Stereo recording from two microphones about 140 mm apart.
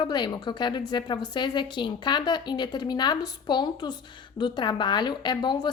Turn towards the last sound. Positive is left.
turn(degrees=30)  # may be behind; listen again after turning